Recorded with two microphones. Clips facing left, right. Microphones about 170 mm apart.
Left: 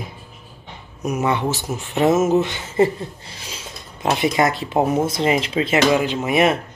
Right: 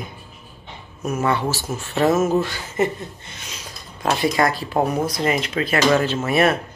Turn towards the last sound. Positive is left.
turn(degrees=15)  # may be behind; listen again after turning